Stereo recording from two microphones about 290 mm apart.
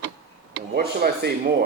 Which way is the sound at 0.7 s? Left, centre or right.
Right.